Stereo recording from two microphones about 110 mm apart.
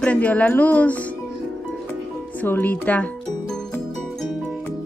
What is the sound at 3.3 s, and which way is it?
Music, 5° left (ahead or behind).